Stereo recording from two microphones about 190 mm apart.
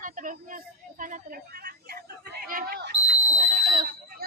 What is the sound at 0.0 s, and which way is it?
A child's voice, 45° right (ahead or behind).